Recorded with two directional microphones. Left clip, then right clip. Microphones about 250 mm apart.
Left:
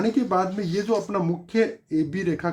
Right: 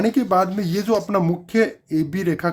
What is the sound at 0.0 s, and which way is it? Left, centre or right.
Speech, right.